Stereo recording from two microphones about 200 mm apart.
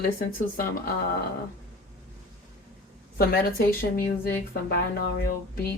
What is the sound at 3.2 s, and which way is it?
Speech, 50° left (ahead or behind).